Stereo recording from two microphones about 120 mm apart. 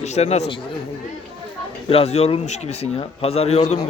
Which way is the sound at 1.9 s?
60° left (ahead or behind).